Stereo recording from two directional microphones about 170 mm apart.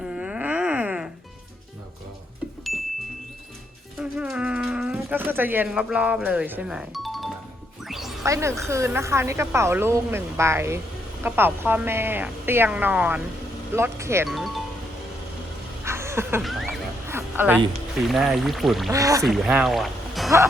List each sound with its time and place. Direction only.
0.0 s wail: 5° right (ahead or behind)
3.9 s music: 5° right (ahead or behind)
8.2 s speech: 15° right (ahead or behind)
14.3 s music: centre (ahead or behind)
15.8 s a sound: 15° right (ahead or behind)
16.4 s speech: centre (ahead or behind)
17.1 s a sound: 15° right (ahead or behind)
18.1 s speech: centre (ahead or behind)
18.9 s speech: 20° right (ahead or behind)
19.2 s speech: centre (ahead or behind)